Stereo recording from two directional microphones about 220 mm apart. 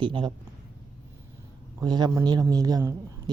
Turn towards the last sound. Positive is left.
turn(degrees=-15)  # may be behind; listen again after turning